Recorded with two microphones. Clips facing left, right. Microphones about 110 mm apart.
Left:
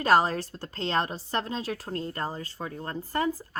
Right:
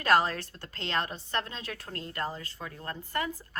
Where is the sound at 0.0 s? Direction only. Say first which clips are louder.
Left 3 dB; 35° left (ahead or behind).